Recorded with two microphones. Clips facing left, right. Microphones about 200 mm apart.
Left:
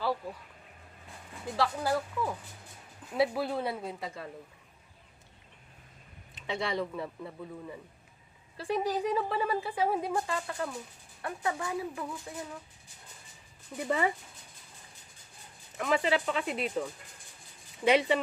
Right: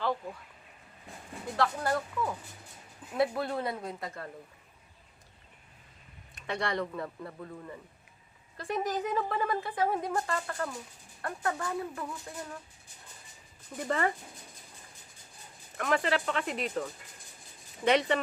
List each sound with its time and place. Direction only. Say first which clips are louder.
1.5 s a woman's voice: even; 5° left (ahead or behind)
6.5 s speech: even; centre (ahead or behind)
13.7 s speech: left 1 dB; 10° left (ahead or behind)
15.8 s speech: left 1 dB; 5° left (ahead or behind)